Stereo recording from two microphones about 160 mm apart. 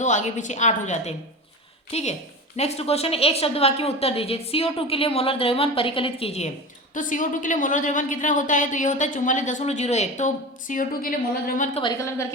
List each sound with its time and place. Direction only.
0.0 s a woman's voice: 50° left (ahead or behind)
6.9 s a woman's voice: 55° left (ahead or behind)
11.9 s a woman's voice: 15° left (ahead or behind)